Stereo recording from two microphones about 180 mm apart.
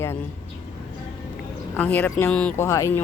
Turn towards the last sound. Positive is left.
turn(degrees=15)  # may be behind; listen again after turning